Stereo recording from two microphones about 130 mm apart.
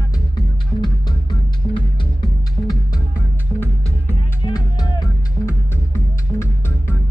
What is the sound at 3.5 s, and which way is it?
Music, 15° right (ahead or behind).